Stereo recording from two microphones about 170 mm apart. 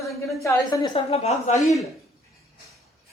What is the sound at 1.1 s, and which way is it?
Speech, 40° left (ahead or behind).